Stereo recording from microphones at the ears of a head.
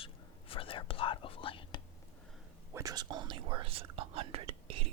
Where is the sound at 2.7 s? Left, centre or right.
Right.